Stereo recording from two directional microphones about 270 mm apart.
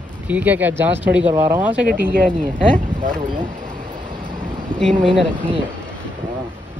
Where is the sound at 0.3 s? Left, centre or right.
Centre.